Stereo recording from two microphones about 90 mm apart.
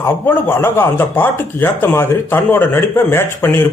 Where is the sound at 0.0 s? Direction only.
25° left (ahead or behind).